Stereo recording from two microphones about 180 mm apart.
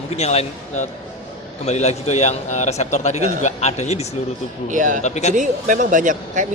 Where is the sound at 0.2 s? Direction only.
35° left (ahead or behind).